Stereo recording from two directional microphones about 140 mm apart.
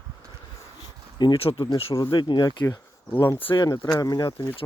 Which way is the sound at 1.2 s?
35° left (ahead or behind).